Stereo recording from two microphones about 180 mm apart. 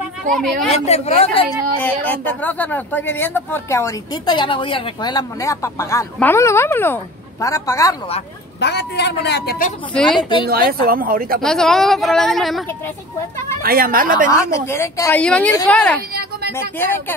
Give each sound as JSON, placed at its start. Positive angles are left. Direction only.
{"t": 0.7, "sound": "a man's voice", "side_deg": 35}
{"t": 2.0, "sound": "speech", "side_deg": 10}
{"t": 8.5, "sound": "a man's voice", "side_deg": 70}
{"t": 9.9, "sound": "a woman's voice", "side_deg": 5}
{"t": 10.5, "sound": "speech", "side_deg": -55}
{"t": 11.4, "sound": "a woman's voice", "side_deg": 5}
{"t": 13.6, "sound": "speech", "side_deg": -55}
{"t": 14.3, "sound": "speech", "side_deg": 15}